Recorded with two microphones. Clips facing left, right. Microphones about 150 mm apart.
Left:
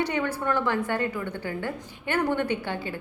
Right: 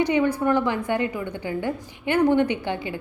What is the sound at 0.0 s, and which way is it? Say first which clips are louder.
A woman's voice: right 6 dB; 15° right (ahead or behind).